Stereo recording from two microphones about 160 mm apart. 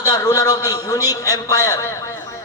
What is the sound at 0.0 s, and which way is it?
A man's voice, 25° left (ahead or behind).